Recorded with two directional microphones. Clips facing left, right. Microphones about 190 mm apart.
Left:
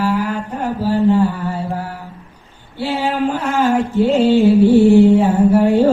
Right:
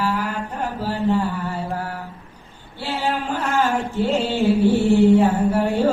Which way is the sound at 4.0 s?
10° left (ahead or behind).